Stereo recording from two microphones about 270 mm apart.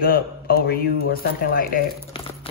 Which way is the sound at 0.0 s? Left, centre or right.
Left.